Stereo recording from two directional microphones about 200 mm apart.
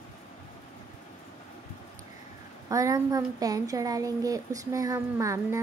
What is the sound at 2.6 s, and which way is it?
A woman's voice, 15° right (ahead or behind).